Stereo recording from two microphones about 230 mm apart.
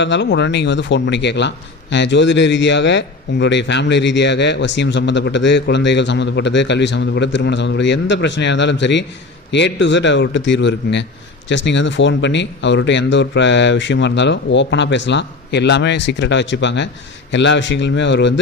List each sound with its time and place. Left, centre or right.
0.0 s a man's voice: left